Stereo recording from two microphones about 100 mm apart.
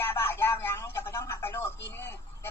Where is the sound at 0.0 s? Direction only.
25° left (ahead or behind).